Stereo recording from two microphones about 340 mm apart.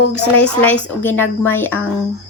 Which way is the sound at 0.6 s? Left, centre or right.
Centre.